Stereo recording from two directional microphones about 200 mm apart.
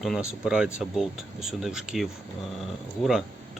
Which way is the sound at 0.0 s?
Centre (ahead or behind).